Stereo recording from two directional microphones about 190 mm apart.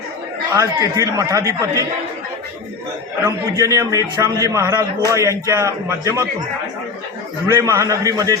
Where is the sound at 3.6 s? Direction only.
15° right (ahead or behind).